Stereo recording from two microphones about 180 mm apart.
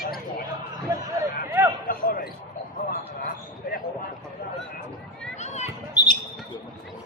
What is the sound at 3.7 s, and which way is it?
Basketball bounce, 55° left (ahead or behind).